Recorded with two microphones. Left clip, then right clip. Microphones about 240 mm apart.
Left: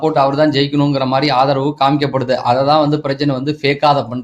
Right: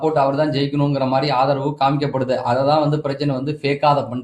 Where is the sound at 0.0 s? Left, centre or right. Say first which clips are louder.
Left 4 dB; left.